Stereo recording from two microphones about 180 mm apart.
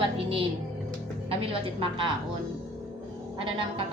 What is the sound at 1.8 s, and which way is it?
Speech, 30° right (ahead or behind).